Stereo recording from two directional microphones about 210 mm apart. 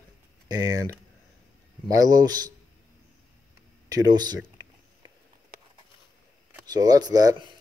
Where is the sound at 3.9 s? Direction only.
20° right (ahead or behind).